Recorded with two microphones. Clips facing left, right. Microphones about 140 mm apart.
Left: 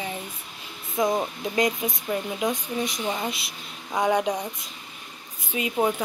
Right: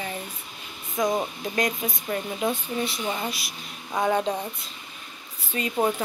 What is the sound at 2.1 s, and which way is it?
Speech, 15° left (ahead or behind).